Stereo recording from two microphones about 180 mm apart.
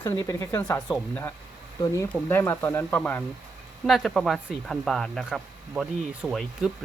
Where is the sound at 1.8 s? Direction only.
15° left (ahead or behind).